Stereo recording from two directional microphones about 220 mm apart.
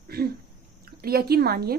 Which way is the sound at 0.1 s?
45° right (ahead or behind).